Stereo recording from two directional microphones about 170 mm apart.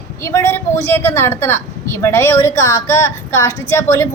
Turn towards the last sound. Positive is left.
turn(degrees=20)  # may be behind; listen again after turning